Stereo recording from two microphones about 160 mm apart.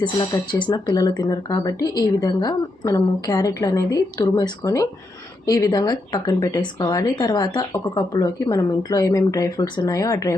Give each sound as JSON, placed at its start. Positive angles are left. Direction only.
{"t": 0.6, "sound": "speech", "side_deg": 25}